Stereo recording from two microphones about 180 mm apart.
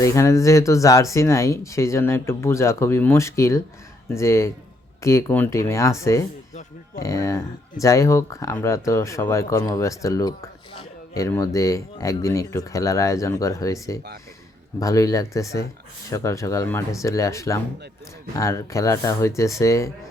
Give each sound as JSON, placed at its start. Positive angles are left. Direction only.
{"t": 0.0, "sound": "speech", "side_deg": 15}